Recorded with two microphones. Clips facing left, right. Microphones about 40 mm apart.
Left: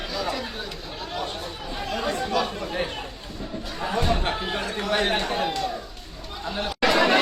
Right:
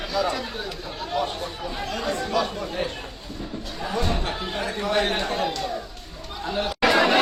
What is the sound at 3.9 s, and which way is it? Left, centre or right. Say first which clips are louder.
Chatter: left 2 dB; centre.